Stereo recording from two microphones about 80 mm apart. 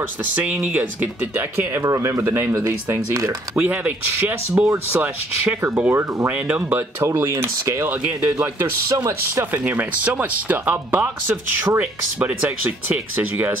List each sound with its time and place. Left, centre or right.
0.2 s speech: centre
3.5 s speech: right
6.3 s speech: centre
7.0 s speech: right
7.9 s speech: centre
8.8 s speech: right
9.6 s speech: centre